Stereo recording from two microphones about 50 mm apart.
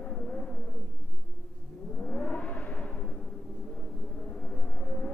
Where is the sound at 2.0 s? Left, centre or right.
Left.